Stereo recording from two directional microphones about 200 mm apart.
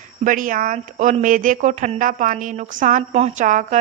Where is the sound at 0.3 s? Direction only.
40° right (ahead or behind).